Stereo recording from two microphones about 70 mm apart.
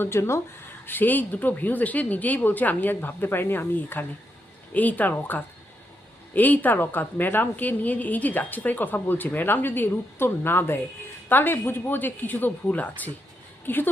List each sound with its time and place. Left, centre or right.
0.0 s speech: left
0.9 s a woman's voice: left
6.3 s a woman's voice: left